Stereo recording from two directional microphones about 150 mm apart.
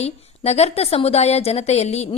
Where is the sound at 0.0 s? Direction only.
45° left (ahead or behind).